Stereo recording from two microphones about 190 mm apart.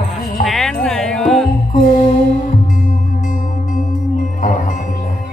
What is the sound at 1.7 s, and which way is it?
Music, 45° left (ahead or behind).